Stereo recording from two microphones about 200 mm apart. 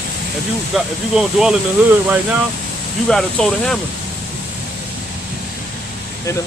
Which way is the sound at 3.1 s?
5° left (ahead or behind).